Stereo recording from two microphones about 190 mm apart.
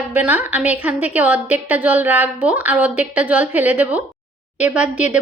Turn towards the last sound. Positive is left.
turn(degrees=-5)  # may be behind; listen again after turning